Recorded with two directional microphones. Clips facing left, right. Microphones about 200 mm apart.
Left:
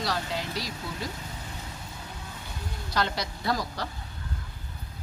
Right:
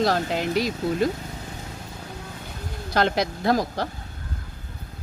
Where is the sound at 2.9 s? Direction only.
55° right (ahead or behind).